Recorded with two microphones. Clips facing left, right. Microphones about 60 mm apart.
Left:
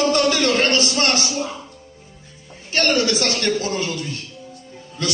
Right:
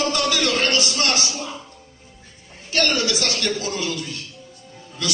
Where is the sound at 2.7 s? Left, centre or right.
Left.